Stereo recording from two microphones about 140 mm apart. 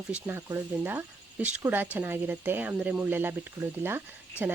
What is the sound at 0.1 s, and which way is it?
Speech, 10° right (ahead or behind).